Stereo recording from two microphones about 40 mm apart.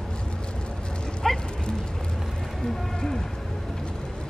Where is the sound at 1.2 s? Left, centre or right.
Centre.